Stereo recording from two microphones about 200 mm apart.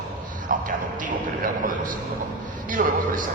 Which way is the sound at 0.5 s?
40° right (ahead or behind).